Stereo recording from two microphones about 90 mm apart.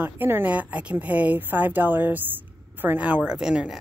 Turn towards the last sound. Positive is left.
turn(degrees=-10)  # may be behind; listen again after turning